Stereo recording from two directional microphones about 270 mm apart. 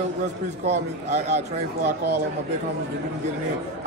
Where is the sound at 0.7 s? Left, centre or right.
Right.